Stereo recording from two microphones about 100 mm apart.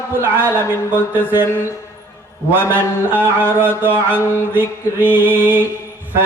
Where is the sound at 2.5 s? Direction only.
20° right (ahead or behind).